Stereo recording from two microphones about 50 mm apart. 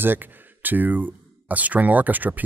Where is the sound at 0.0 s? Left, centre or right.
Right.